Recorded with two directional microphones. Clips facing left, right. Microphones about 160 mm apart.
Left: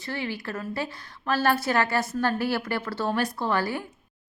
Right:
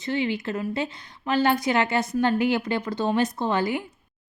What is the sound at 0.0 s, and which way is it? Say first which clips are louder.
A woman's voice: right 6 dB; 20° right (ahead or behind).